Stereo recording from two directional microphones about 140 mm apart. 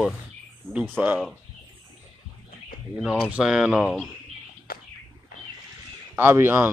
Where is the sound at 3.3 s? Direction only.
5° right (ahead or behind).